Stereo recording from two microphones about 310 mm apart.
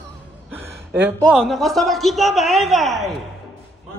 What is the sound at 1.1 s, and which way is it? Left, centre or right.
A man's voice, centre.